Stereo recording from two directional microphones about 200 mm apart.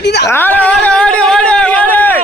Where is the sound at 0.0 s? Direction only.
55° left (ahead or behind).